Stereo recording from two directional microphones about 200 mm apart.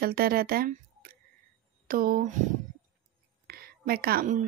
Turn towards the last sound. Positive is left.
turn(degrees=-50)  # may be behind; listen again after turning